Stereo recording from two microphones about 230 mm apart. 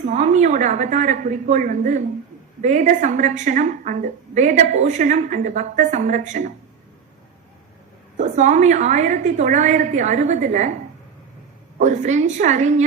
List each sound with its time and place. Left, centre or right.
0.0 s a woman's voice: right
8.1 s a woman's voice: right
11.8 s a woman's voice: right